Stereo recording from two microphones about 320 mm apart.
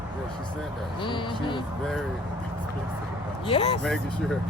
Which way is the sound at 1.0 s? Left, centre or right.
Centre.